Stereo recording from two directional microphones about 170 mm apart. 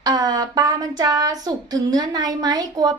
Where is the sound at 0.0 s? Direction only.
25° right (ahead or behind).